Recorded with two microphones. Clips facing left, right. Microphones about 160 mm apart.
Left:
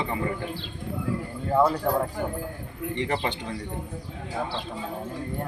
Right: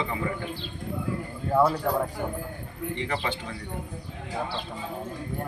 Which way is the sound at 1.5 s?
5° left (ahead or behind).